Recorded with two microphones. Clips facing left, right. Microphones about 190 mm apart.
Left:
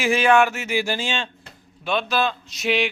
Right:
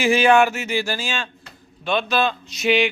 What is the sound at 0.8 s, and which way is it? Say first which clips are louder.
Speech: left 1 dB; 20° left (ahead or behind).